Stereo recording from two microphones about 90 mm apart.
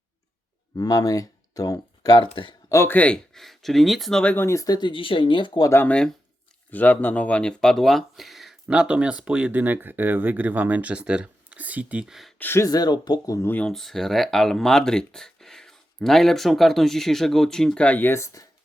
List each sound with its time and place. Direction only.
0.8 s speech: 45° left (ahead or behind)
2.2 s speech: 70° left (ahead or behind)
2.6 s speech: 35° left (ahead or behind)
2.9 s speech: 15° left (ahead or behind)
3.3 s speech: centre (ahead or behind)
4.2 s speech: 15° left (ahead or behind)
4.4 s speech: 40° left (ahead or behind)
4.8 s speech: 70° left (ahead or behind)
6.7 s speech: 20° left (ahead or behind); by 12.1 s 15° right (ahead or behind)
12.4 s speech: 25° left (ahead or behind)
12.6 s speech: 45° left (ahead or behind)
13.4 s speech: 20° left (ahead or behind)
13.7 s speech: 5° left (ahead or behind); by 18.4 s 35° left (ahead or behind)